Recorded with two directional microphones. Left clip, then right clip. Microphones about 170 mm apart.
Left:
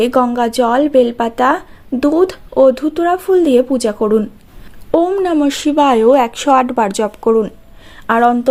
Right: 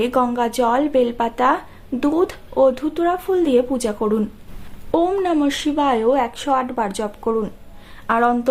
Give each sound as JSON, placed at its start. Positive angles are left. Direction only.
{"t": 0.0, "sound": "a woman's voice", "side_deg": 35}